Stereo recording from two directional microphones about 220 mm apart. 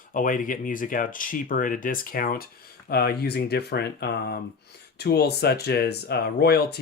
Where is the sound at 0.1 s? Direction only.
35° left (ahead or behind).